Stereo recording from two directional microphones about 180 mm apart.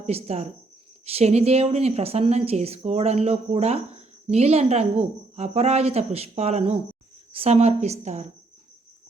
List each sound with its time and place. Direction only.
0.0 s speech: 35° right (ahead or behind)